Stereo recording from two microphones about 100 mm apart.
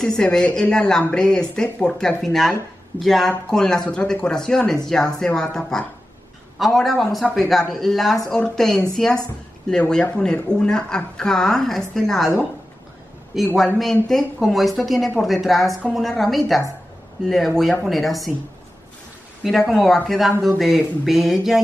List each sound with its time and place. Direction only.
0.0 s a woman's voice: 5° left (ahead or behind)
13.3 s a woman's voice: centre (ahead or behind)
19.4 s a woman's voice: centre (ahead or behind)